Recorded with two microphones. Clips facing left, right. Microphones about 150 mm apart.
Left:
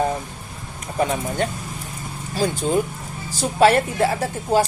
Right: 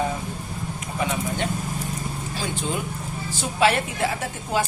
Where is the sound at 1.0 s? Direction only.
45° left (ahead or behind).